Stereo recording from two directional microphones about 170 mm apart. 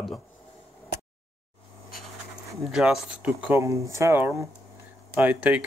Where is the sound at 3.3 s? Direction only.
15° right (ahead or behind).